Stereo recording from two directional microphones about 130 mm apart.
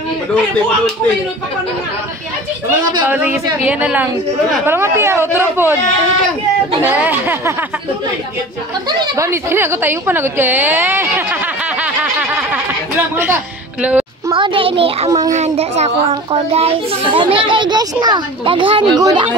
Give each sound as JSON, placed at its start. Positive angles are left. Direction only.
{"t": 3.1, "sound": "a woman's voice", "side_deg": -15}
{"t": 6.8, "sound": "a woman's voice", "side_deg": -15}
{"t": 8.8, "sound": "a woman's voice", "side_deg": -25}
{"t": 11.8, "sound": "snicker", "side_deg": -10}
{"t": 13.1, "sound": "a woman's voice", "side_deg": -15}
{"t": 14.3, "sound": "a child's voice", "side_deg": -40}
{"t": 15.0, "sound": "a child's voice", "side_deg": -25}
{"t": 15.3, "sound": "a child's voice", "side_deg": -55}